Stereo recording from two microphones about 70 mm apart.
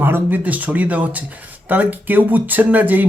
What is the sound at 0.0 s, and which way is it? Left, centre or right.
Speech, right.